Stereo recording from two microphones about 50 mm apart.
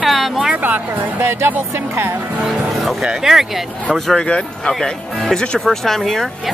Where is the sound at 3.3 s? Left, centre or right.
Centre.